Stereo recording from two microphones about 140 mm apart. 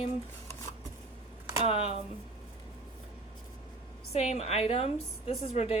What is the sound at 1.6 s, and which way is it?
Speech, 45° left (ahead or behind).